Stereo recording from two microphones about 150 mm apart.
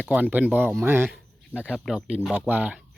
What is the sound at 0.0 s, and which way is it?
Speech, 10° right (ahead or behind).